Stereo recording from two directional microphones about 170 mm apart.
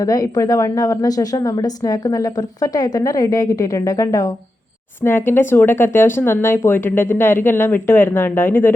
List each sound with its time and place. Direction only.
0.0 s a woman's voice: 20° left (ahead or behind)